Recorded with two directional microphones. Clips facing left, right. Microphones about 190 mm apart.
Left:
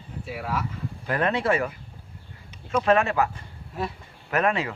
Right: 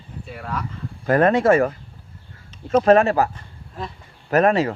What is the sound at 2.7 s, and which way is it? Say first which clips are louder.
Speech: right 7 dB; 40° right (ahead or behind).